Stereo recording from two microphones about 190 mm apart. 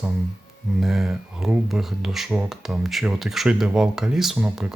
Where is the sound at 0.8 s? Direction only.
5° right (ahead or behind).